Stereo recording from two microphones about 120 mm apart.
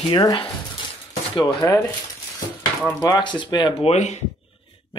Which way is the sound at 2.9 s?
30° left (ahead or behind).